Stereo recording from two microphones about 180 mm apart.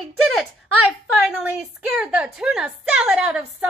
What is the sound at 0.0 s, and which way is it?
A woman's voice, centre (ahead or behind).